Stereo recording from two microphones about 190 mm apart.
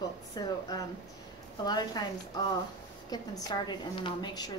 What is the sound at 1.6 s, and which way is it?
Speech, 20° left (ahead or behind).